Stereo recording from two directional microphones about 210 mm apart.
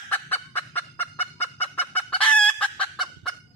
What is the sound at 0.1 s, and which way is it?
Gobble, 10° left (ahead or behind).